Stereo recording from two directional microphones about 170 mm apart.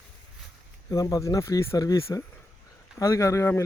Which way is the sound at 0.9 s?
20° left (ahead or behind).